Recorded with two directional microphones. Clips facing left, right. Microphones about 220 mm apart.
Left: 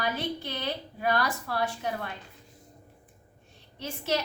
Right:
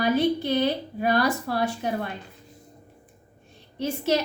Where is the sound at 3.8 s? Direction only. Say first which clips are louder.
Right 10 dB; 10° right (ahead or behind).